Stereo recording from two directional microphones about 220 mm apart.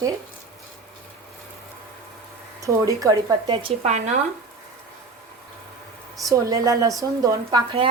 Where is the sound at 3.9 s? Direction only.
30° right (ahead or behind).